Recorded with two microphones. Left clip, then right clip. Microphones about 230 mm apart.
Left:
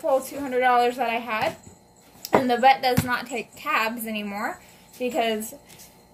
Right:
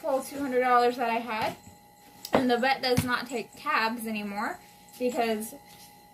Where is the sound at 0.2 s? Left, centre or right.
Centre.